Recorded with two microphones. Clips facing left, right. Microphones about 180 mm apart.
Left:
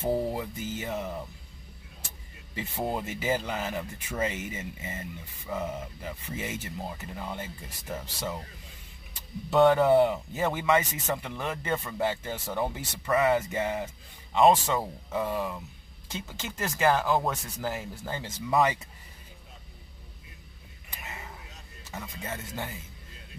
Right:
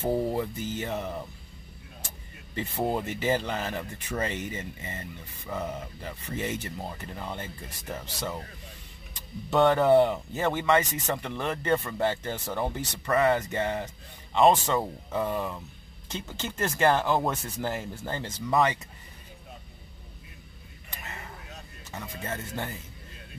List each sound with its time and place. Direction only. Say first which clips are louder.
0.0 s speech: right 2 dB; centre (ahead or behind)
2.5 s speech: right 3 dB; 5° left (ahead or behind)
9.5 s speech: even; 5° left (ahead or behind)
21.0 s a sound: even; 5° left (ahead or behind)
21.9 s speech: right 2 dB; 5° left (ahead or behind)